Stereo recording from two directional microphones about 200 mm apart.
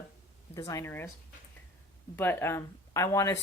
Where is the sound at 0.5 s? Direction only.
15° left (ahead or behind).